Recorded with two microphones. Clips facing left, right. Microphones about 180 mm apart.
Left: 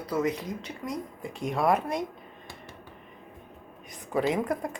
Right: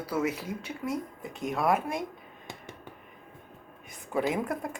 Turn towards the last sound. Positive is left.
turn(degrees=-5)  # may be behind; listen again after turning